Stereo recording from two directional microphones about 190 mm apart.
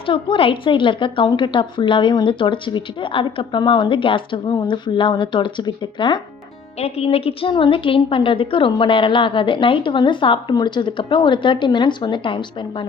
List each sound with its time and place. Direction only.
0.0 s a woman's voice: 25° left (ahead or behind)